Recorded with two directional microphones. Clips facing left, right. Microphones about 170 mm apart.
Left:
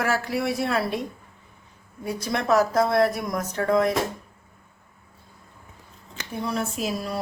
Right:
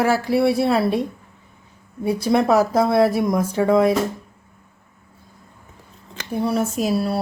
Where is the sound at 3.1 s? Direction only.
25° right (ahead or behind).